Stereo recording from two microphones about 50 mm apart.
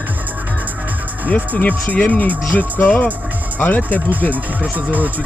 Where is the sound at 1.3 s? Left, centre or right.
Left.